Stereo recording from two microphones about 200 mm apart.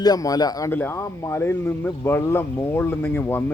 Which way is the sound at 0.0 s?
20° left (ahead or behind).